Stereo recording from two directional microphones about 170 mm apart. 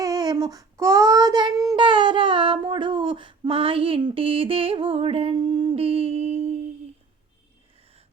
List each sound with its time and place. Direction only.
0.0 s child singing: 20° right (ahead or behind); by 6.6 s 40° right (ahead or behind)